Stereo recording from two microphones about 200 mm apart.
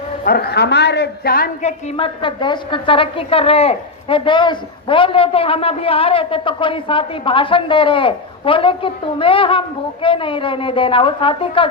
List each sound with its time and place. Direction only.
0.3 s a woman's voice: 50° left (ahead or behind)
1.6 s a woman's voice: 30° left (ahead or behind)